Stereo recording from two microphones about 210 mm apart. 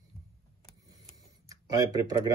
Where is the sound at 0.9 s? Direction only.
20° right (ahead or behind).